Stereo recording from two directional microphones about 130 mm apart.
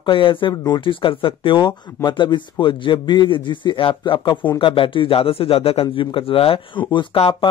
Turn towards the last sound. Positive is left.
turn(degrees=40)  # may be behind; listen again after turning